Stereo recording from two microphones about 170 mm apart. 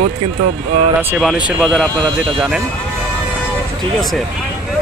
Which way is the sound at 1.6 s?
5° left (ahead or behind).